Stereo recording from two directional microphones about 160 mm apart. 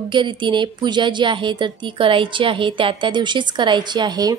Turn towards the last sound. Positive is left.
turn(degrees=-25)  # may be behind; listen again after turning